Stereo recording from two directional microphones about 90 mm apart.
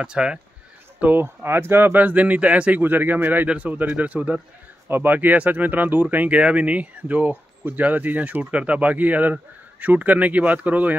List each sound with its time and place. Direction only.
0.0 s speech: 10° right (ahead or behind)
0.9 s speech: 20° right (ahead or behind)